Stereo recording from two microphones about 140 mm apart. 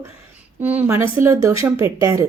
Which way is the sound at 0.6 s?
10° right (ahead or behind).